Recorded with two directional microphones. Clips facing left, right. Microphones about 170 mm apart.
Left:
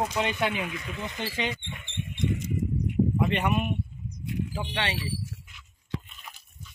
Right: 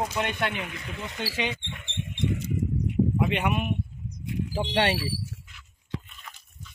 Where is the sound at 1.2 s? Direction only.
5° right (ahead or behind).